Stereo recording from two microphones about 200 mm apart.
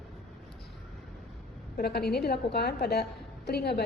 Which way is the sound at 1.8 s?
50° left (ahead or behind).